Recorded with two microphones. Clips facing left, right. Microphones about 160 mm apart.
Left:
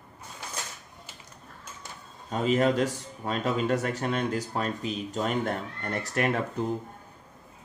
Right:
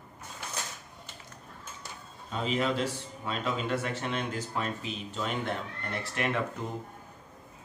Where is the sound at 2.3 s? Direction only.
45° left (ahead or behind).